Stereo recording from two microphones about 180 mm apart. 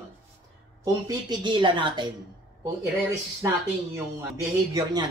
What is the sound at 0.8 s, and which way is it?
A man's voice, 20° right (ahead or behind).